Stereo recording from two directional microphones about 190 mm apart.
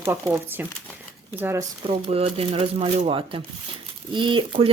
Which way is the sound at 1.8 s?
30° right (ahead or behind).